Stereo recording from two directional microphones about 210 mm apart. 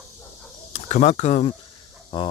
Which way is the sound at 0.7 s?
35° left (ahead or behind).